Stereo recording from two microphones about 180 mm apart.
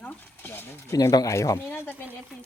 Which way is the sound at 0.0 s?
10° left (ahead or behind).